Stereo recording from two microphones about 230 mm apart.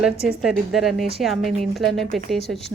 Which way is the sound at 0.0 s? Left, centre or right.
Centre.